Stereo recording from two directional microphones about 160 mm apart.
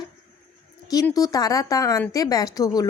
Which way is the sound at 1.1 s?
25° left (ahead or behind).